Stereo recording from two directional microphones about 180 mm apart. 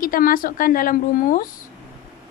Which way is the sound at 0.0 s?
50° left (ahead or behind).